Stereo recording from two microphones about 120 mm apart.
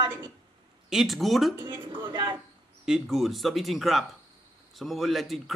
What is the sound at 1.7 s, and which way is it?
Speech, 45° right (ahead or behind).